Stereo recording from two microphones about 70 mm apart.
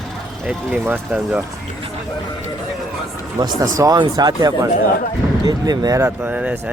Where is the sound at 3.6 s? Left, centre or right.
Right.